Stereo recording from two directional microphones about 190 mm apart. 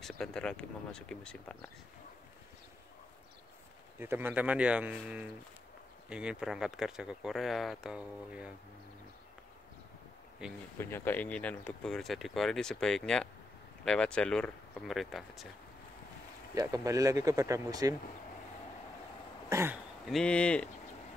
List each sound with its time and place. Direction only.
0.0 s speech: 5° left (ahead or behind)
4.0 s speech: 10° right (ahead or behind)
10.8 s speech: 10° left (ahead or behind)
16.5 s speech: 15° right (ahead or behind)
19.5 s speech: 10° right (ahead or behind)
20.1 s speech: 5° left (ahead or behind)